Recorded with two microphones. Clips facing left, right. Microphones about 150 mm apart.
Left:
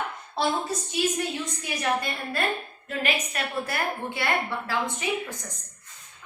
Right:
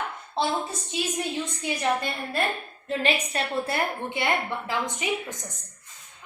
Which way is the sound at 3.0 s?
30° right (ahead or behind).